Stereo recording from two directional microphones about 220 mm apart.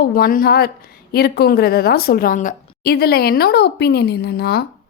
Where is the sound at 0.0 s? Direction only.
40° left (ahead or behind).